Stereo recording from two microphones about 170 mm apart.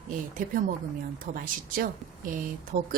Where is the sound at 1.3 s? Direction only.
60° right (ahead or behind).